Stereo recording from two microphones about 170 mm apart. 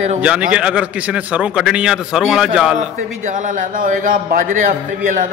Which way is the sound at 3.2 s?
50° right (ahead or behind).